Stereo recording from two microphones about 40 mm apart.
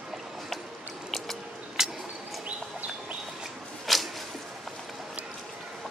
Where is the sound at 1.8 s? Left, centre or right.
Centre.